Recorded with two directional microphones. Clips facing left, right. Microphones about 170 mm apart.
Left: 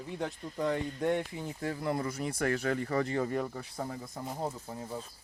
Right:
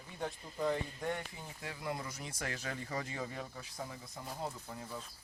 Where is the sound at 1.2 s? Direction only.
80° left.